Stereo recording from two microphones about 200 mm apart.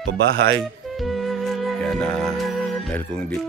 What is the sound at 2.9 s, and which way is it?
Speech, 5° left (ahead or behind).